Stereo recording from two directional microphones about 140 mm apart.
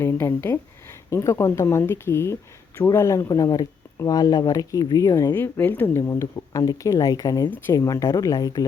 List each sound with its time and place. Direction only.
0.0 s speech: 15° left (ahead or behind)